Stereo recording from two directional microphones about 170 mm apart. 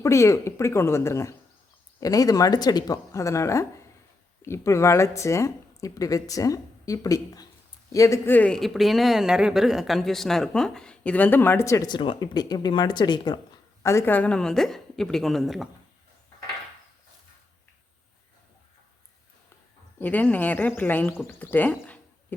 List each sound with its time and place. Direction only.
0.0 s speech: 15° left (ahead or behind); by 15.7 s centre (ahead or behind)
20.0 s speech: 10° left (ahead or behind)